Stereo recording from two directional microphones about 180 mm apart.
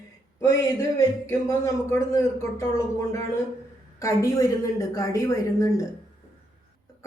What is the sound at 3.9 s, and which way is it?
Speech, 15° left (ahead or behind).